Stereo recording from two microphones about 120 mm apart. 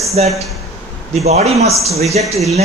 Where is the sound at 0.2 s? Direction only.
60° right (ahead or behind).